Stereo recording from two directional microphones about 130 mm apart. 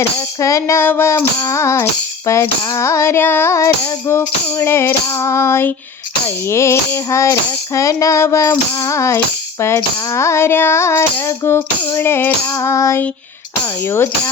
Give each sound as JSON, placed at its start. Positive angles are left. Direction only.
{"t": 0.3, "sound": "tambourine", "side_deg": 25}